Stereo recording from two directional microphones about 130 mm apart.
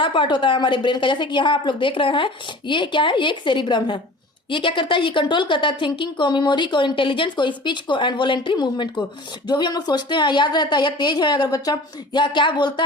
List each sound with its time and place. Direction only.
0.0 s a woman's voice: 40° left (ahead or behind)